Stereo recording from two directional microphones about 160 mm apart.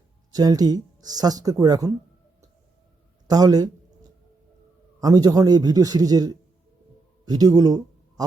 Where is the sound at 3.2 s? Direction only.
25° right (ahead or behind).